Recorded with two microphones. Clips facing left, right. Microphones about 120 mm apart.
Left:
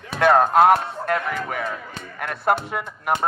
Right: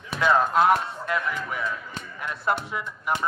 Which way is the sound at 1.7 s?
60° left (ahead or behind).